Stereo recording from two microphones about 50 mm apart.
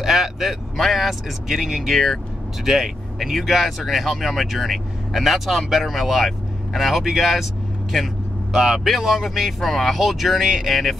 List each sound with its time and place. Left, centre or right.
0.0 s speech: centre